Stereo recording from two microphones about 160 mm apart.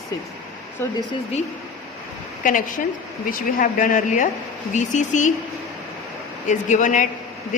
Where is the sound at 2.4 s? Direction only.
55° left (ahead or behind).